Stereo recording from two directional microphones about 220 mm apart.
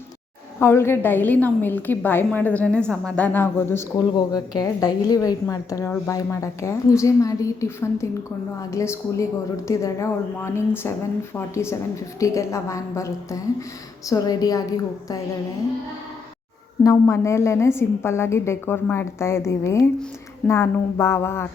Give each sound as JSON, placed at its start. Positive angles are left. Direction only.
{"t": 0.6, "sound": "a woman's voice", "side_deg": 10}
{"t": 16.8, "sound": "a woman's voice", "side_deg": 15}